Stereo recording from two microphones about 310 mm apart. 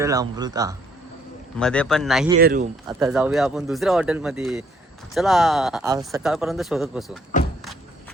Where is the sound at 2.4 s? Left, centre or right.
Right.